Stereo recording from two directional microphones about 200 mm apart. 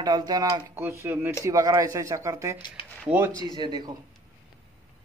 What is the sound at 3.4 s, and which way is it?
Speech, 20° right (ahead or behind).